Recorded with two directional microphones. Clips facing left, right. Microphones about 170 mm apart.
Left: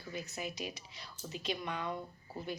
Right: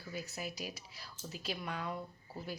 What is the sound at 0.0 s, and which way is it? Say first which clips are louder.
Speech: left 1 dB; 5° right (ahead or behind).